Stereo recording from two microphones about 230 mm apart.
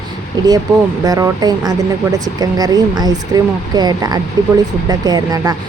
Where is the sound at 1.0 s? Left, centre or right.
Centre.